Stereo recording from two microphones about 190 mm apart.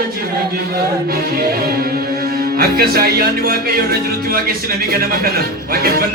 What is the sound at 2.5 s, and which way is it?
Speech, 50° right (ahead or behind).